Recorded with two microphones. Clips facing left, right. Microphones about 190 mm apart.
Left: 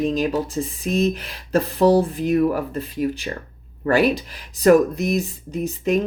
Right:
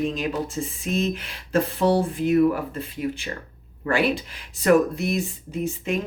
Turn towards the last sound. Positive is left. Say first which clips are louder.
# left 5 dB
turn(degrees=40)  # may be behind; listen again after turning